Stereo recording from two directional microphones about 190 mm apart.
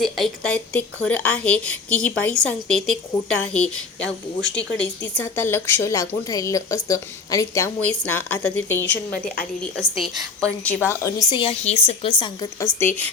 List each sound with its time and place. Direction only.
0.0 s a woman's voice: 5° left (ahead or behind)
9.1 s a woman's voice: 50° left (ahead or behind)
10.4 s a woman's voice: 5° left (ahead or behind); by 12.5 s 25° left (ahead or behind)
12.8 s a woman's voice: 10° left (ahead or behind)